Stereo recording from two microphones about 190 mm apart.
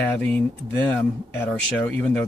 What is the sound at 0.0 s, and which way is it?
Speech, 10° left (ahead or behind).